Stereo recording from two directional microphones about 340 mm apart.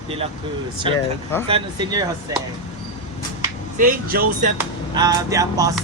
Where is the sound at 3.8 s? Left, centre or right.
Right.